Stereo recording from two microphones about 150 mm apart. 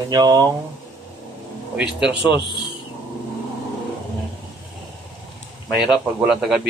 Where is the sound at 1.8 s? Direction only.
5° right (ahead or behind).